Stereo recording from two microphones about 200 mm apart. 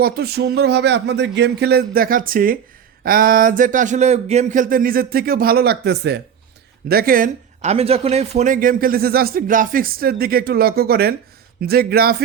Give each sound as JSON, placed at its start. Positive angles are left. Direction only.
{"t": 0.0, "sound": "speech", "side_deg": -50}